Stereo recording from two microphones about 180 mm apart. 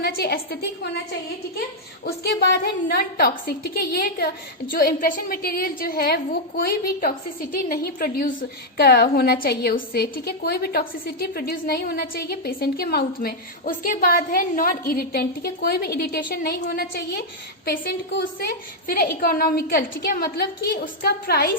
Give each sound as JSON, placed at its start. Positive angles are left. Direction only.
{"t": 0.0, "sound": "a woman's voice", "side_deg": 60}
{"t": 2.0, "sound": "a woman's voice", "side_deg": 65}